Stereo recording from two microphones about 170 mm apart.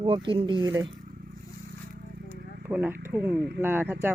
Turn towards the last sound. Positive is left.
turn(degrees=-10)  # may be behind; listen again after turning